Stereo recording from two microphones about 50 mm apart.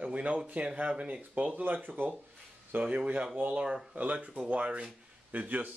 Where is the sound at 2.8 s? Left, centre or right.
Right.